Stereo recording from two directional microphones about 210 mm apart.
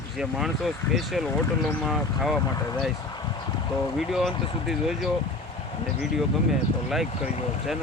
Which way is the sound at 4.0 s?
Centre (ahead or behind).